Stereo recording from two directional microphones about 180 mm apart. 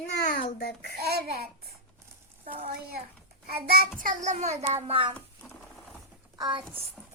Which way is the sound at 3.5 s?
60° right (ahead or behind).